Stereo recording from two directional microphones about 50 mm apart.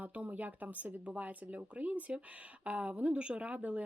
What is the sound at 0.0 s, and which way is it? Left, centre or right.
A woman's voice, right.